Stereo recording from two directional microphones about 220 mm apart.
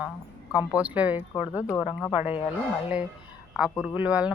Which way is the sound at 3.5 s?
5° right (ahead or behind).